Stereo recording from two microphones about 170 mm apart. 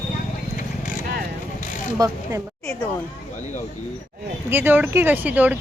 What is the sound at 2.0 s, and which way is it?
Speech, 20° right (ahead or behind).